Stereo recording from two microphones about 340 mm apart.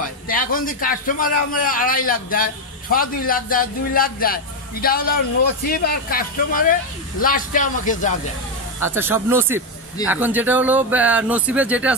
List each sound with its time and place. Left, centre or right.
0.0 s speech: left
8.8 s speech: centre